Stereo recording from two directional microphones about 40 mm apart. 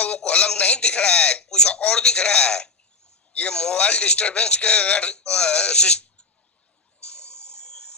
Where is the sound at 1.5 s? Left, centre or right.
Left.